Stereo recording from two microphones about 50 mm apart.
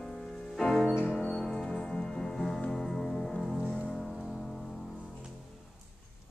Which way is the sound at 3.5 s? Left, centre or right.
Centre.